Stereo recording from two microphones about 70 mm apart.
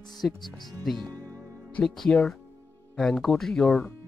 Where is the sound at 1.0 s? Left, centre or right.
Right.